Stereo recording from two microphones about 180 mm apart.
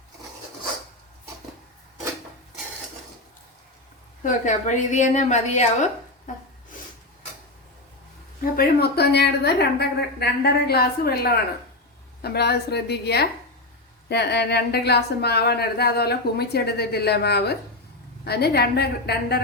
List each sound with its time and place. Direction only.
4.2 s a woman's voice: 45° left (ahead or behind)
8.4 s speech: 55° left (ahead or behind)